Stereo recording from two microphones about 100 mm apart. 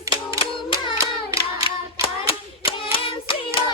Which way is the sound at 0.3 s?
65° left (ahead or behind).